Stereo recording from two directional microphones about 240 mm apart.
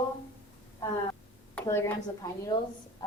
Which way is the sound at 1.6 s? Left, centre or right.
Centre.